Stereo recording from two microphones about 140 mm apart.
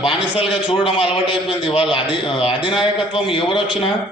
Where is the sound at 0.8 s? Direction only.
40° left (ahead or behind).